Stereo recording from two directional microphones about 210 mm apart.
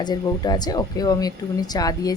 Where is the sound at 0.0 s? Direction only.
20° left (ahead or behind).